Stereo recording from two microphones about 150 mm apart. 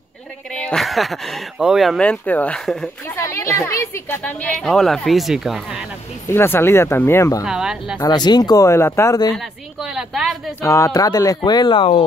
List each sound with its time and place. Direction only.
0.5 s a woman's voice: 5° left (ahead or behind)
3.2 s a woman's voice: 20° left (ahead or behind); by 5.9 s 5° right (ahead or behind)
6.2 s speech: 15° left (ahead or behind)
7.4 s a woman's voice: 5° right (ahead or behind)
8.0 s speech: 30° left (ahead or behind)
9.3 s a sound: centre (ahead or behind)
10.6 s speech: 20° left (ahead or behind)